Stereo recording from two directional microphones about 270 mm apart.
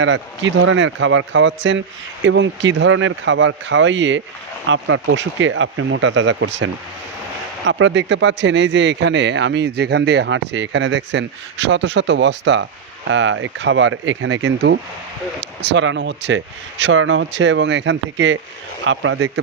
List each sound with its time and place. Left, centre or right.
0.0 s speech: right